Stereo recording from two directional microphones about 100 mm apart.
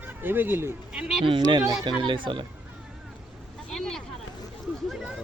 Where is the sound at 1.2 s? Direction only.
55° right (ahead or behind).